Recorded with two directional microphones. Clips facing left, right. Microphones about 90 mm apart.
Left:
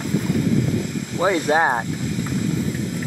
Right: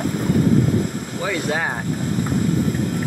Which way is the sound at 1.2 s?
30° left (ahead or behind).